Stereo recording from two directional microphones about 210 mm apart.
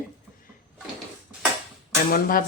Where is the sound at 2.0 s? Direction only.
45° left (ahead or behind).